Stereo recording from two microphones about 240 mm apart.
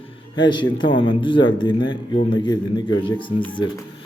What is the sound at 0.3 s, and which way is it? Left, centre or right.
A man's voice, centre.